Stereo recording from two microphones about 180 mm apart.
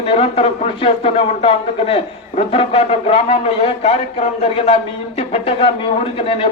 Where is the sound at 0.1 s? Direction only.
30° left (ahead or behind).